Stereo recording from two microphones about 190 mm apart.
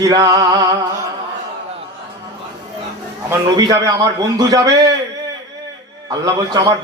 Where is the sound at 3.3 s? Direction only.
20° right (ahead or behind).